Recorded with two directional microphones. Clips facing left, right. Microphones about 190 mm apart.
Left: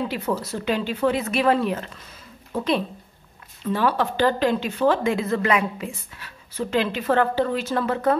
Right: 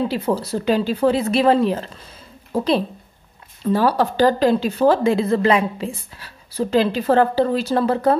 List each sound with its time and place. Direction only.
0.1 s speech: 30° right (ahead or behind)